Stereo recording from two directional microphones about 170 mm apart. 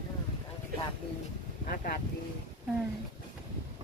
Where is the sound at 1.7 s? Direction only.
60° left (ahead or behind).